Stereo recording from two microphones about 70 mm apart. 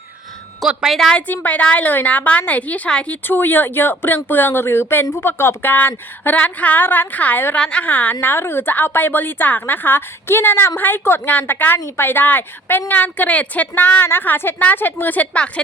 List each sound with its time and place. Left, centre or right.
0.7 s a woman's voice: centre
1.1 s a woman's voice: left
7.6 s a woman's voice: centre
7.9 s a woman's voice: left